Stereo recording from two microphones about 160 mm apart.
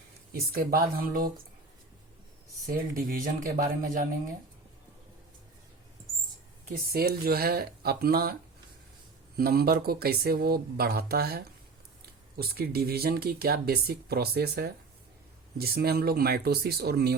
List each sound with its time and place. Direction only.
0.3 s speech: 65° right (ahead or behind)
2.6 s speech: 60° right (ahead or behind)
6.9 s speech: 75° right (ahead or behind)
9.4 s speech: 70° right (ahead or behind)